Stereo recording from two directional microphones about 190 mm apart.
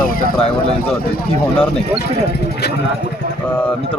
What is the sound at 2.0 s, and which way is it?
Speech, 60° left (ahead or behind).